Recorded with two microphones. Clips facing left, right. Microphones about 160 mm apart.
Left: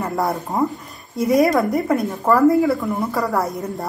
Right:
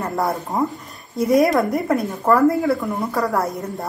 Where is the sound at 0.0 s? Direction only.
Centre (ahead or behind).